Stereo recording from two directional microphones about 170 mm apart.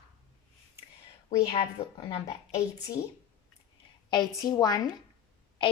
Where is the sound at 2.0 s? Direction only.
25° left (ahead or behind).